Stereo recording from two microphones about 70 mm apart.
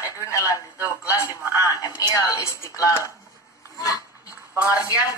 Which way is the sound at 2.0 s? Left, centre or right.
Left.